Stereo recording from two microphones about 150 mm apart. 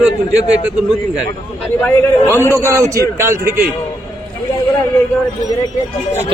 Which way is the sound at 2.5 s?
20° right (ahead or behind).